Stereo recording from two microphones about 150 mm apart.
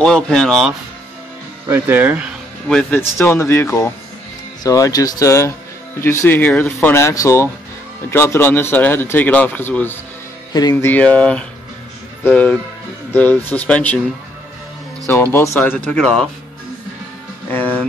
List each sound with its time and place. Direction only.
0.0 s speech: 5° left (ahead or behind)
1.7 s speech: 15° right (ahead or behind)
2.7 s speech: 5° left (ahead or behind)
3.2 s speech: 20° left (ahead or behind)
10.5 s speech: 25° left (ahead or behind)
10.9 s speech: 10° left (ahead or behind)
15.3 s speech: 20° left (ahead or behind)
17.5 s music: 10° left (ahead or behind)